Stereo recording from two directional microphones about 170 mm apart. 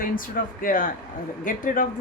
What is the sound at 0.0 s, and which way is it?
A woman's voice, 55° left (ahead or behind).